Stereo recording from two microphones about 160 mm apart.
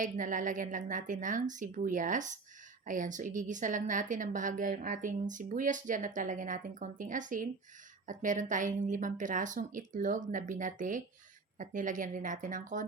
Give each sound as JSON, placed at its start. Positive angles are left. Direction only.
{"t": 0.0, "sound": "a woman's voice", "side_deg": -55}